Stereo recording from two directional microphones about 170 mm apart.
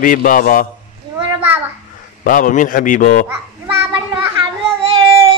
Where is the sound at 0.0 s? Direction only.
50° left (ahead or behind).